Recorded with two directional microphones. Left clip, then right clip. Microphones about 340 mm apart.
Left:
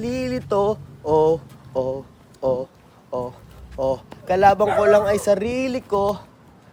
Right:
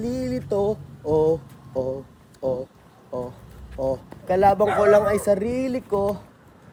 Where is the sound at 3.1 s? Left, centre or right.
Centre.